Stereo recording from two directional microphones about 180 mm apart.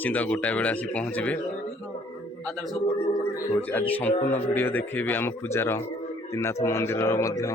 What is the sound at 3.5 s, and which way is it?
Speech, 10° left (ahead or behind).